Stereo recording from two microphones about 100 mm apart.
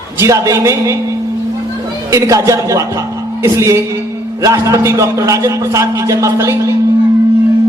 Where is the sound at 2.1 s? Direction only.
30° right (ahead or behind).